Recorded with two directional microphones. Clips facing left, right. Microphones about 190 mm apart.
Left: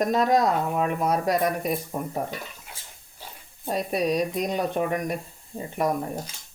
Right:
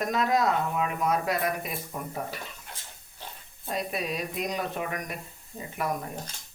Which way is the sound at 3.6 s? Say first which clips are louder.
Left 6 dB; 40° left (ahead or behind).